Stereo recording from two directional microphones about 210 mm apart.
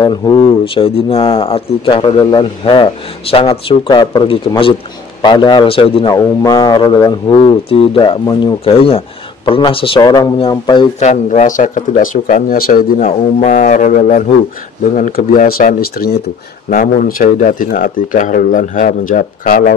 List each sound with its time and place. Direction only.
0.0 s a man's voice: 20° left (ahead or behind); by 12.8 s 45° left (ahead or behind)
13.0 s speech: 30° left (ahead or behind)